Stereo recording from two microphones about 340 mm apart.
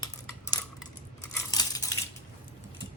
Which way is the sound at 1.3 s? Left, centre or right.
Centre.